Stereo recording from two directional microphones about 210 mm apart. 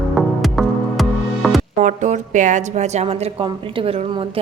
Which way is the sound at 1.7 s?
35° right (ahead or behind).